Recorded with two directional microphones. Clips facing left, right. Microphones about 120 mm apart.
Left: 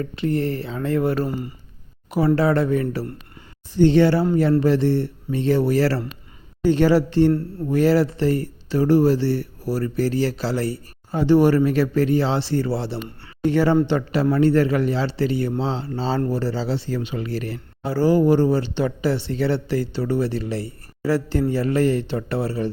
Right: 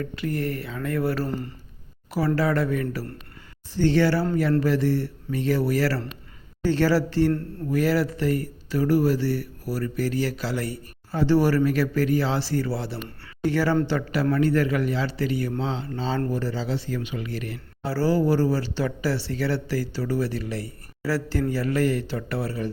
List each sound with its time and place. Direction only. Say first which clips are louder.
0.0 s speech: left 5 dB; 25° left (ahead or behind)
1.3 s speech: left 2 dB; 10° left (ahead or behind)
2.0 s speech: left 5 dB; 25° left (ahead or behind)
11.1 s a man's voice: left 4 dB; 20° left (ahead or behind); by 17.6 s 35° left (ahead or behind)
17.8 s speech: left 5 dB; 20° left (ahead or behind)